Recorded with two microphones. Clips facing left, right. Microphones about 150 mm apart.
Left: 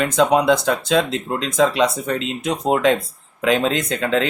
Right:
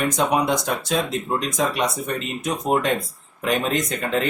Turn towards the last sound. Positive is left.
turn(degrees=90)